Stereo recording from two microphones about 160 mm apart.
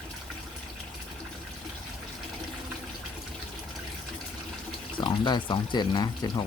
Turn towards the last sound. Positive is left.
turn(degrees=25)  # may be behind; listen again after turning